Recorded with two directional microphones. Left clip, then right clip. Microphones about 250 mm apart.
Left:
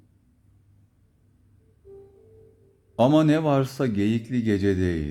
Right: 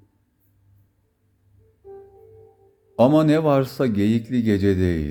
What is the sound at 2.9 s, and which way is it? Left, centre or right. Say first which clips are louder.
Speech: right 3 dB; centre.